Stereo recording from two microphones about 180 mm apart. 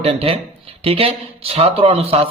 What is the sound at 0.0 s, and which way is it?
A man's voice, 30° right (ahead or behind).